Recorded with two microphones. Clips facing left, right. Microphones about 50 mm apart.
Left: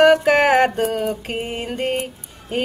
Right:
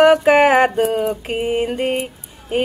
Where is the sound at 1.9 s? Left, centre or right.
Centre.